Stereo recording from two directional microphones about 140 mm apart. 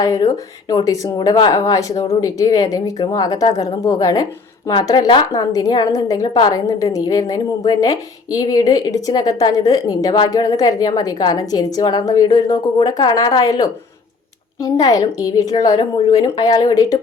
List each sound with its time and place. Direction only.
0.0 s speech: 25° left (ahead or behind)